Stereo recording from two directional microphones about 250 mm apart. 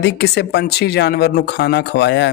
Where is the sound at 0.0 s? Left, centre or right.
Left.